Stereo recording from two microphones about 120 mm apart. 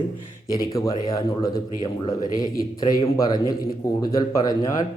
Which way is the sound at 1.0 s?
30° left (ahead or behind).